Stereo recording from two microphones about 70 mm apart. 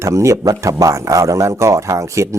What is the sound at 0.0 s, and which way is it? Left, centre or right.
Speech, right.